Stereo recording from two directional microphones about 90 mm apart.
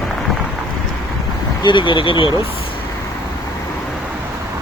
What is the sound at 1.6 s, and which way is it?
Speech, 65° left (ahead or behind).